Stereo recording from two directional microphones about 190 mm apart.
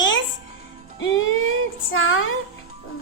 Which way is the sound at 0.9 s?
85° left.